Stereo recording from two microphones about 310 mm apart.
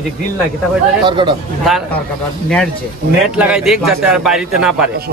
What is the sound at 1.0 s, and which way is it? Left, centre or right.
Speech, centre.